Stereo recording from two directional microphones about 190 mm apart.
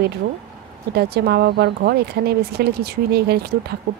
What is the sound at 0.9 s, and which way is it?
Speech, 55° right (ahead or behind).